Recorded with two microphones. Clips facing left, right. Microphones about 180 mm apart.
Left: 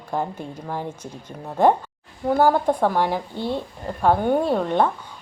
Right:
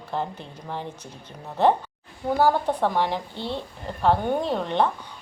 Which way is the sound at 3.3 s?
45° left (ahead or behind).